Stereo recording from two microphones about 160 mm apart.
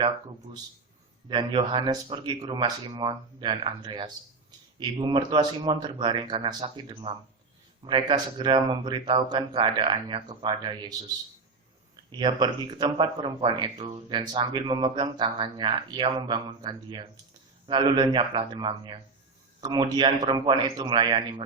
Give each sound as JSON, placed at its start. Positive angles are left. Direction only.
{"t": 1.3, "sound": "a man's voice", "side_deg": -30}
{"t": 12.1, "sound": "a man's voice", "side_deg": -30}